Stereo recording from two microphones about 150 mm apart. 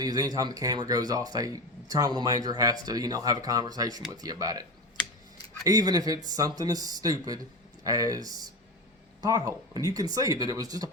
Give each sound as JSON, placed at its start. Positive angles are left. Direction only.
{"t": 0.0, "sound": "speech", "side_deg": -25}
{"t": 5.6, "sound": "speech", "side_deg": -25}